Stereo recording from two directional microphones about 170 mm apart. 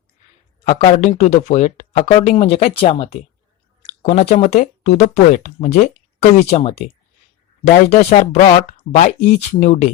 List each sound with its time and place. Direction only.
0.9 s speech: 40° left (ahead or behind)
7.9 s speech: 45° left (ahead or behind)